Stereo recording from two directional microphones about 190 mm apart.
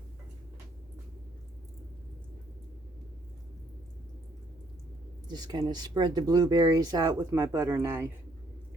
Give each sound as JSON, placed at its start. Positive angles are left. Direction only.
{"t": 5.3, "sound": "speech", "side_deg": -20}